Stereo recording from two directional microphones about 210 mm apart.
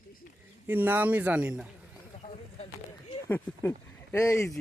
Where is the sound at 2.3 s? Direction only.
30° left (ahead or behind).